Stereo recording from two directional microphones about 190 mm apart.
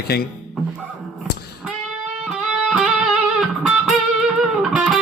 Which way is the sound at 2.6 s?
Centre (ahead or behind).